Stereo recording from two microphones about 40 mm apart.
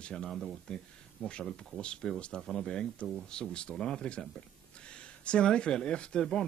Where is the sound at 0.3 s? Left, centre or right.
Centre.